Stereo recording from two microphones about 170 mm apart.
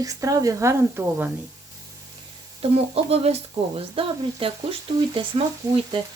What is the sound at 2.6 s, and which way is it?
Speech, 35° right (ahead or behind).